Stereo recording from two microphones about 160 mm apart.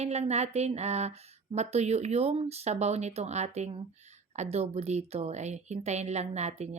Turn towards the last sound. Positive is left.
turn(degrees=-45)  # may be behind; listen again after turning